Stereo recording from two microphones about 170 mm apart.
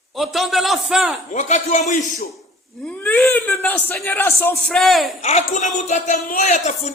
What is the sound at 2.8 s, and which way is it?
Speech, 10° left (ahead or behind).